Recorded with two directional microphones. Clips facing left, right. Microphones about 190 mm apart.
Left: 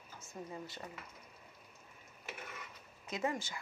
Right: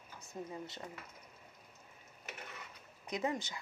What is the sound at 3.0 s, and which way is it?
Speech, 20° right (ahead or behind).